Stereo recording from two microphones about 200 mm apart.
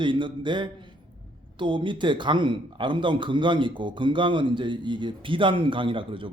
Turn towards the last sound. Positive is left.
turn(degrees=-25)  # may be behind; listen again after turning